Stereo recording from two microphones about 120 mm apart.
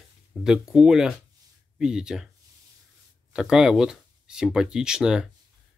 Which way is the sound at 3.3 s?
5° right (ahead or behind).